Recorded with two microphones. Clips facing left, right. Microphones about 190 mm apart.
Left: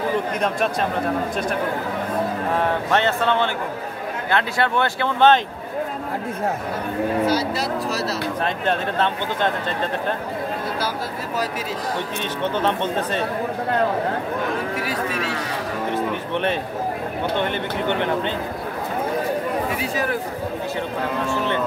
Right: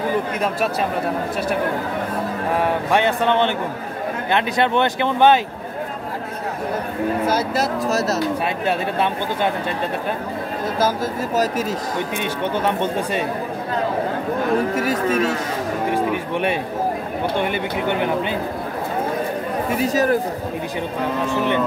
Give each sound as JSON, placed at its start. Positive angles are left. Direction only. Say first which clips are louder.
{"t": 0.4, "sound": "speech", "louder": "right 1 dB", "side_deg": -5}
{"t": 2.5, "sound": "speech", "louder": "right 3 dB", "side_deg": -10}
{"t": 7.2, "sound": "speech", "louder": "right 1 dB", "side_deg": -50}
{"t": 8.6, "sound": "speech", "louder": "right 1 dB", "side_deg": -10}
{"t": 12.5, "sound": "speech", "louder": "right 1 dB", "side_deg": -10}
{"t": 14.8, "sound": "speech", "louder": "right 6 dB", "side_deg": -45}
{"t": 15.9, "sound": "speech", "louder": "right 2 dB", "side_deg": -10}
{"t": 19.8, "sound": "speech", "louder": "right 6 dB", "side_deg": -40}